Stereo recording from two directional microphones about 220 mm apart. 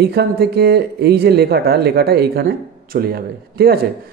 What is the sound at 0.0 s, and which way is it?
Speech, 45° right (ahead or behind).